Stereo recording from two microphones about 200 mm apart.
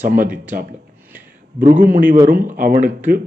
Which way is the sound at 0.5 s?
40° right (ahead or behind).